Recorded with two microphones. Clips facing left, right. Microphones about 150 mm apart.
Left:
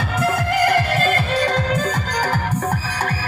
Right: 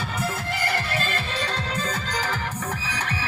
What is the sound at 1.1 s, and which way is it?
Music, 50° left (ahead or behind).